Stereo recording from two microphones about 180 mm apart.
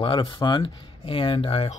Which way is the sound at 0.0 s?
25° left (ahead or behind).